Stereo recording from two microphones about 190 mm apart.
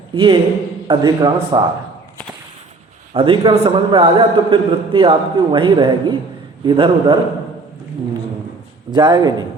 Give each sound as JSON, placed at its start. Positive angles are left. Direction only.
{"t": 0.1, "sound": "a man's voice", "side_deg": -25}
{"t": 3.1, "sound": "a man's voice", "side_deg": -25}
{"t": 8.9, "sound": "a man's voice", "side_deg": -20}